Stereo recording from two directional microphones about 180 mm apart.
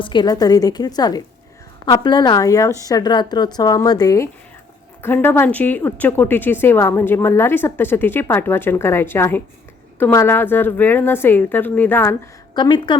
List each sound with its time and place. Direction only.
0.0 s a woman's voice: 25° left (ahead or behind)
12.5 s a woman's voice: 25° left (ahead or behind)